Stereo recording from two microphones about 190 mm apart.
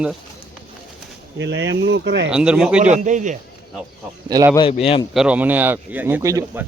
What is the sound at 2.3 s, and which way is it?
Speech, 5° right (ahead or behind).